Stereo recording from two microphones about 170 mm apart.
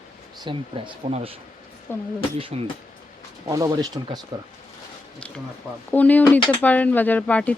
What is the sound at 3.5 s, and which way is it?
Speech, 20° right (ahead or behind).